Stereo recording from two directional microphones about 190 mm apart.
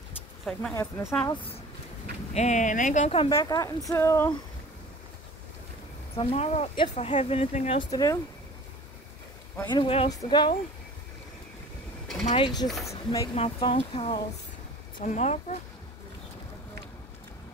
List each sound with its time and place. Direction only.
0.5 s speech: 5° left (ahead or behind)
1.3 s speech: 30° left (ahead or behind)
2.3 s speech: 40° left (ahead or behind)
3.3 s speech: 15° left (ahead or behind)
6.1 s speech: 35° left (ahead or behind)
9.7 s speech: 25° left (ahead or behind)
12.3 s speech: 25° left (ahead or behind)
13.3 s speech: 30° left (ahead or behind)